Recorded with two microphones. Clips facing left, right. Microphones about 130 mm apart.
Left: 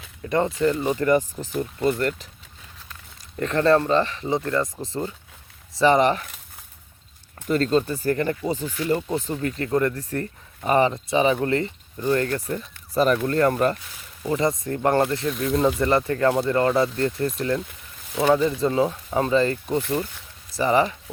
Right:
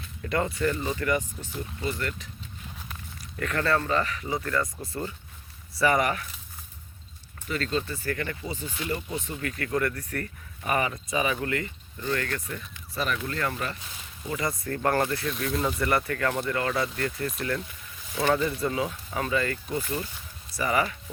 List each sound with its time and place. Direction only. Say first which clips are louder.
0.3 s speech: left 5 dB; 25° left (ahead or behind)
0.9 s speech: left 7 dB; 35° left (ahead or behind)
1.5 s speech: left 9 dB; 50° left (ahead or behind)
3.3 s speech: left 8 dB; 30° left (ahead or behind)
7.4 s speech: left 9 dB; 40° left (ahead or behind)
8.9 s speech: left 9 dB; 35° left (ahead or behind)
14.3 s speech: left 7 dB; 25° left (ahead or behind)
18.3 s speech: left 6 dB; 20° left (ahead or behind)
18.7 s speech: left 8 dB; 30° left (ahead or behind)